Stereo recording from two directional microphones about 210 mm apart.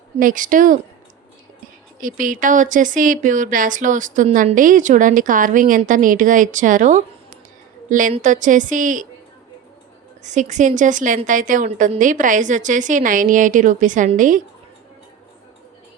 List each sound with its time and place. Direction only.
0.2 s speech: 40° right (ahead or behind)
2.0 s speech: 40° right (ahead or behind)
10.2 s speech: 35° right (ahead or behind)